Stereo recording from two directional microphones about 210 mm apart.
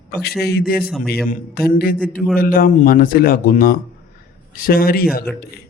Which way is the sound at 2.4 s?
45° left (ahead or behind).